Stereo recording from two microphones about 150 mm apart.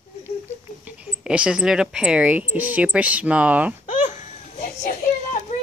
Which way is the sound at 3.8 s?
60° left (ahead or behind).